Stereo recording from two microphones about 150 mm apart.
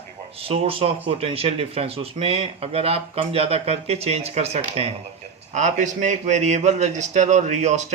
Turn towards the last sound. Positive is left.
turn(degrees=-50)  # may be behind; listen again after turning